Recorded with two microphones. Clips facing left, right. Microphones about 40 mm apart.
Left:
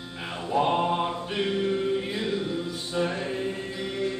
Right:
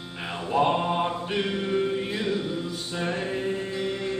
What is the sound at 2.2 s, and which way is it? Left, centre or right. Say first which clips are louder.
Music: right 1 dB; centre.